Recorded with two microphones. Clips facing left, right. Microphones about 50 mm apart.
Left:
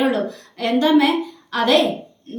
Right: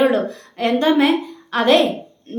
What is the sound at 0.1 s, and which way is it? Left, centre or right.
A woman's voice, right.